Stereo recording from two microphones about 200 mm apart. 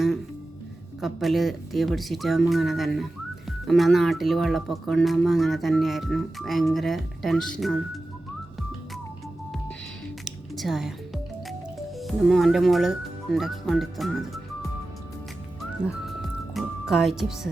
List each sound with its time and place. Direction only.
1.0 s speech: centre (ahead or behind)
10.2 s music: centre (ahead or behind)
11.9 s speech: centre (ahead or behind)
15.8 s music: centre (ahead or behind)